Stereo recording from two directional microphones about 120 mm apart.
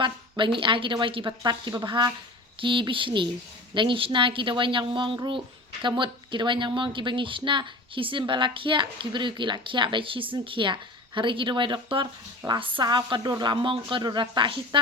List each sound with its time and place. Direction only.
0.0 s a woman's voice: 45° right (ahead or behind)